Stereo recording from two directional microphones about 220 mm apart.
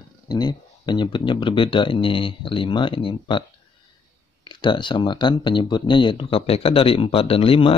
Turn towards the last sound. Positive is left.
turn(degrees=25)  # may be behind; listen again after turning